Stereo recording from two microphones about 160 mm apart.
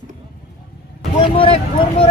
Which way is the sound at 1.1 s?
35° left (ahead or behind).